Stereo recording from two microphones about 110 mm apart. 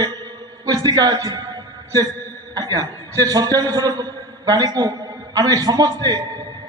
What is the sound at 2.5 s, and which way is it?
A man's voice, 35° right (ahead or behind).